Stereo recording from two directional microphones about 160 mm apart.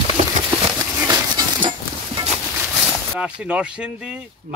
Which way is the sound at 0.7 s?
25° right (ahead or behind).